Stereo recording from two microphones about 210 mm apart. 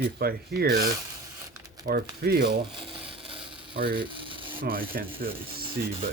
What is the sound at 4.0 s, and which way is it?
Rub, 25° right (ahead or behind).